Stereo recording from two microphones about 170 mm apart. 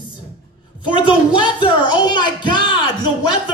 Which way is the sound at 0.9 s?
30° left (ahead or behind).